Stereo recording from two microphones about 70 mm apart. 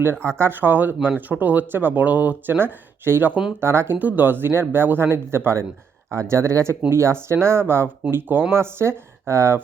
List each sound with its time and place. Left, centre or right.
0.3 s speech: right
3.9 s speech: right